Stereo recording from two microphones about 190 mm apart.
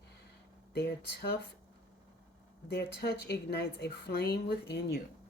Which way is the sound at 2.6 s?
60° left (ahead or behind).